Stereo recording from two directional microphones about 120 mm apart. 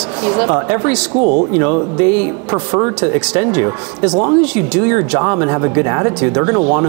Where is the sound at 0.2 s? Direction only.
20° right (ahead or behind).